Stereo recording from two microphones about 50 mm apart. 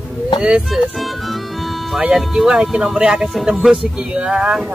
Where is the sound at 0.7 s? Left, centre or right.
Centre.